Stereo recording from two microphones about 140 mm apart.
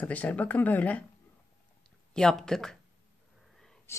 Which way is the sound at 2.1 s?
5° left (ahead or behind).